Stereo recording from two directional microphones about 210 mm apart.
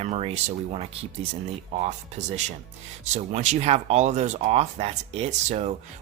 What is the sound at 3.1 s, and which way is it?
Speech, 35° right (ahead or behind).